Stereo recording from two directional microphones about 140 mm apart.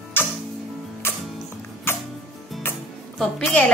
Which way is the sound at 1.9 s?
15° left (ahead or behind).